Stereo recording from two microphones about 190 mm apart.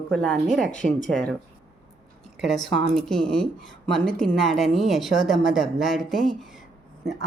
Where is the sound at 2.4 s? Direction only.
Centre (ahead or behind).